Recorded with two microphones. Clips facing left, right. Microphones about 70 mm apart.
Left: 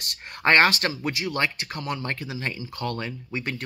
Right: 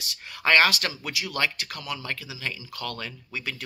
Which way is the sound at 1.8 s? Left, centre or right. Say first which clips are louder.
Left 4 dB; left.